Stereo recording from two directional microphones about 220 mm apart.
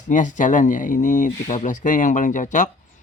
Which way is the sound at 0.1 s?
35° left (ahead or behind).